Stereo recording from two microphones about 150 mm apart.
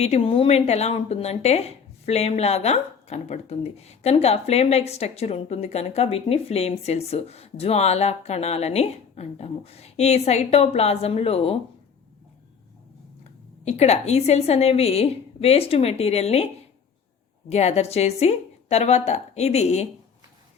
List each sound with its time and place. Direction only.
0.0 s speech: 40° left (ahead or behind)
13.7 s speech: 45° left (ahead or behind)
17.5 s speech: 45° left (ahead or behind)